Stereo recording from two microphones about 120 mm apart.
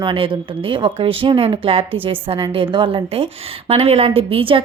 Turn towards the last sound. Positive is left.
turn(degrees=-50)  # may be behind; listen again after turning